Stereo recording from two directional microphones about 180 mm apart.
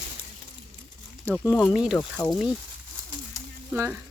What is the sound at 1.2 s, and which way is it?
Speech, 10° left (ahead or behind).